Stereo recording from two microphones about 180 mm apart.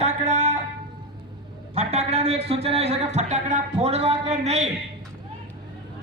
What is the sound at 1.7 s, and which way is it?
Speech, 35° right (ahead or behind).